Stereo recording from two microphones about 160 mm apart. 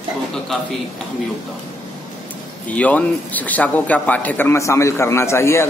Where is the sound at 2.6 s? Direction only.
10° left (ahead or behind).